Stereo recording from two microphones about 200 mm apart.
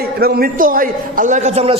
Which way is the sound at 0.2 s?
50° right (ahead or behind).